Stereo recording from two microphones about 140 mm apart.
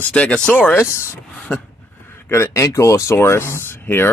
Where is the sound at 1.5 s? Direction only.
5° left (ahead or behind).